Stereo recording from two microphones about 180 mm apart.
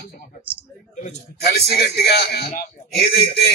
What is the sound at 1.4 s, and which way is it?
A man's voice, 65° left (ahead or behind).